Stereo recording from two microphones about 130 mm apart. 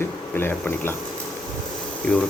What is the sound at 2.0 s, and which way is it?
Speech, 10° left (ahead or behind).